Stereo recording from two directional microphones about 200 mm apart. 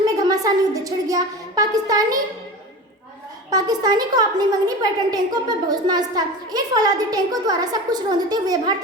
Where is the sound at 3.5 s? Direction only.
20° right (ahead or behind).